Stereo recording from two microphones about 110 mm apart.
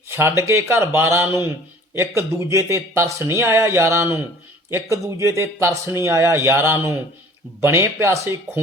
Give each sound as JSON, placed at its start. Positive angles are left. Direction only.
{"t": 0.1, "sound": "speech", "side_deg": -25}